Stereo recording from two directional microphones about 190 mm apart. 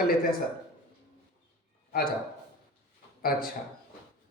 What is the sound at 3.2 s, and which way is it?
Speech, 50° left (ahead or behind).